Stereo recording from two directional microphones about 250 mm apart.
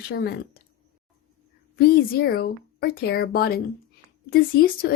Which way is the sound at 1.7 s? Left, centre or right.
Left.